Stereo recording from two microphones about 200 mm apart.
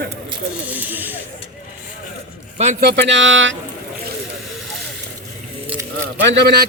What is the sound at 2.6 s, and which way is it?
Speech, 35° right (ahead or behind).